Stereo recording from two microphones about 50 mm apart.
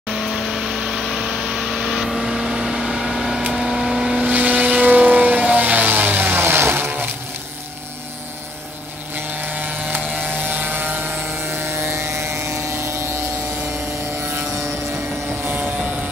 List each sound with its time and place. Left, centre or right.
0.3 s vehicle: centre
4.2 s vehicle: right
6.4 s vehicle: right
9.4 s a sound: right
10.1 s vehicle: right